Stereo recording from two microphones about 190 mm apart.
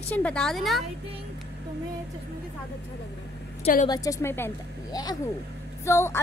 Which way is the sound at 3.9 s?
15° left (ahead or behind).